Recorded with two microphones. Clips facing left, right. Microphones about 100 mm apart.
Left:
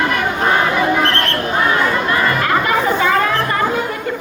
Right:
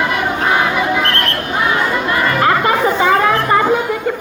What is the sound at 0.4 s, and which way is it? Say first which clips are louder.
Crowd: left 1 dB; 5° right (ahead or behind).